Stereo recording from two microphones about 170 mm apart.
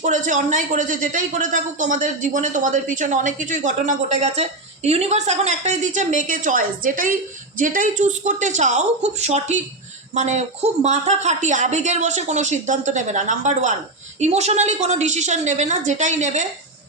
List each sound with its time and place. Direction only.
0.0 s speech: 50° right (ahead or behind)